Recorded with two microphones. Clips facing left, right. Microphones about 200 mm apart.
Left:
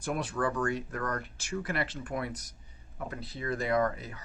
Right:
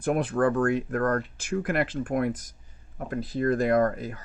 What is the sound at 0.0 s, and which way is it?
Speech, 55° right (ahead or behind).